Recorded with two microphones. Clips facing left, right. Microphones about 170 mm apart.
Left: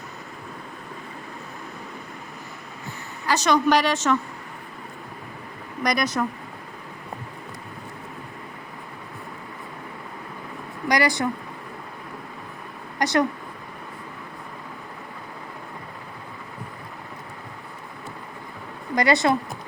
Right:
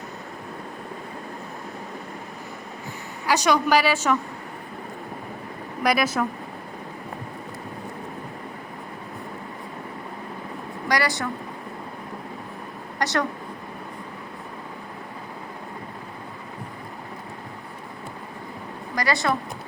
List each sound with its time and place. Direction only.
3.2 s a woman's voice: 10° right (ahead or behind)
5.8 s speech: 5° right (ahead or behind)
10.8 s a sound: 15° left (ahead or behind)
13.0 s speech: 15° left (ahead or behind)
18.9 s speech: 20° left (ahead or behind)